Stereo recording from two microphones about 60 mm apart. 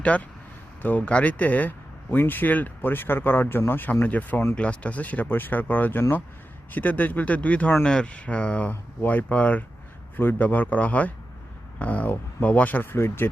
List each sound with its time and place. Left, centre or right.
0.1 s speech: left